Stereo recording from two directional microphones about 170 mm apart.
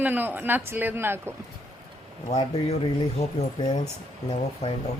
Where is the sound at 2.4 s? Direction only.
35° left (ahead or behind).